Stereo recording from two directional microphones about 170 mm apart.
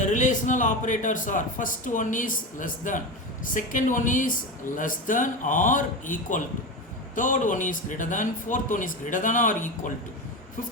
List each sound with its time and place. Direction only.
0.0 s a man's voice: 45° left (ahead or behind)